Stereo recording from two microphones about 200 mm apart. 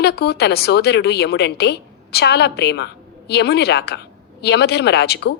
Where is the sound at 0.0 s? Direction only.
55° left (ahead or behind).